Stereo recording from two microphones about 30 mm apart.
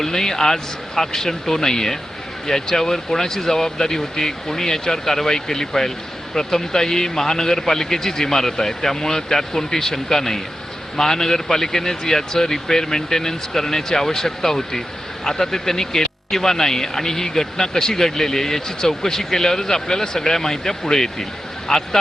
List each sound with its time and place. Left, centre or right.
0.0 s speech: centre